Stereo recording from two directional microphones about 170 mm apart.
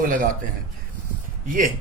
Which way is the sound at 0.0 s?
55° right (ahead or behind).